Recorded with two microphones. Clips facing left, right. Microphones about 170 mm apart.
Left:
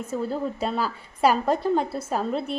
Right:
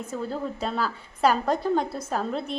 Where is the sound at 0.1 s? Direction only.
5° left (ahead or behind).